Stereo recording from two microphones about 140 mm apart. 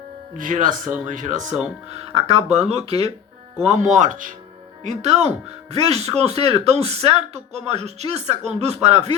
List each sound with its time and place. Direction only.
0.3 s speech: 70° right (ahead or behind); by 9.0 s 50° right (ahead or behind)